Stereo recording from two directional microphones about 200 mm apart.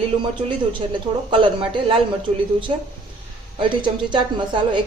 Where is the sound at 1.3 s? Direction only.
25° right (ahead or behind).